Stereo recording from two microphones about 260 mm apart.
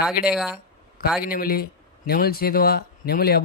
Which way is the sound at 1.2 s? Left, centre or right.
Left.